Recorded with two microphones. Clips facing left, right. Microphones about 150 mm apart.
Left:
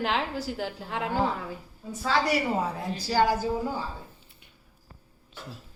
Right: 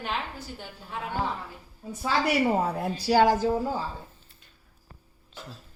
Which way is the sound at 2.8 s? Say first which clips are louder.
Right 4 dB; 60° right (ahead or behind).